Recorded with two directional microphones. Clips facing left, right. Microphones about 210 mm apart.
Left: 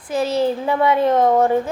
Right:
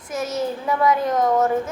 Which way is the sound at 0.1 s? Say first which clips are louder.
Left 6 dB; 30° left (ahead or behind).